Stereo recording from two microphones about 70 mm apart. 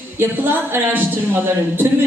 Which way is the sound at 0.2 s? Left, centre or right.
Right.